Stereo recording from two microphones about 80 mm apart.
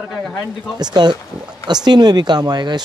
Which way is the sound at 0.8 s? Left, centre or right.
Right.